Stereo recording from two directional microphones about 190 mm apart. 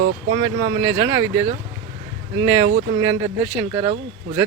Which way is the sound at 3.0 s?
15° right (ahead or behind).